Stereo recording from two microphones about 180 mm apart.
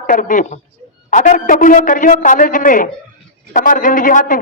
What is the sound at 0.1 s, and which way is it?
A man's voice, 45° left (ahead or behind).